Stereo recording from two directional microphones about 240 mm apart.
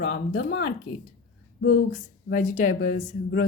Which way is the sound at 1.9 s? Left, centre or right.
Left.